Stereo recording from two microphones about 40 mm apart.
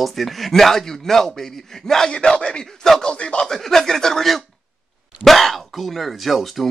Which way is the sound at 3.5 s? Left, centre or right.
Centre.